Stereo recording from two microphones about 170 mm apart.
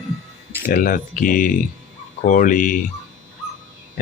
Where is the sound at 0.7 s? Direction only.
55° left (ahead or behind).